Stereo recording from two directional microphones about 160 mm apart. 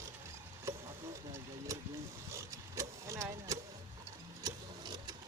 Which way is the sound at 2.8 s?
20° right (ahead or behind).